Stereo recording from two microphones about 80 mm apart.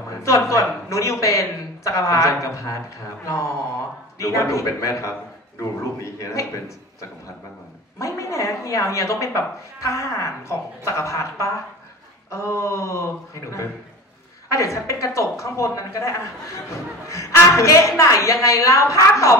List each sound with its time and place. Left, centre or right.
0.1 s speech: left
4.2 s speech: left
8.0 s speech: left